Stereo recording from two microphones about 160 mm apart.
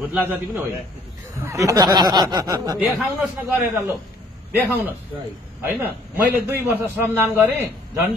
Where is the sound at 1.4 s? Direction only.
20° right (ahead or behind).